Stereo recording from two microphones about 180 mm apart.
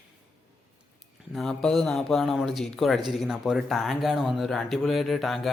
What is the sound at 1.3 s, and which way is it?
Speech, centre (ahead or behind).